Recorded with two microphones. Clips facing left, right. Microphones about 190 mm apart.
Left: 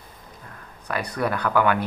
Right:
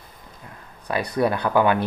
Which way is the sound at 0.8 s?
30° right (ahead or behind).